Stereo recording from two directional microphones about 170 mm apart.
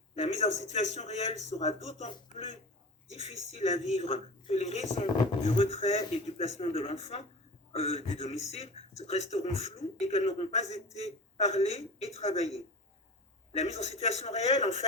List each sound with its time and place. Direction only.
0.2 s a man's voice: 40° left (ahead or behind)